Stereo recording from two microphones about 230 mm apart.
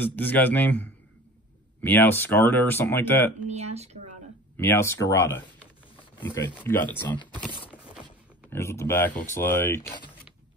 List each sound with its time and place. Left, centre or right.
0.0 s speech: centre
3.4 s speech: right
4.6 s speech: centre
6.2 s speech: left
6.6 s speech: centre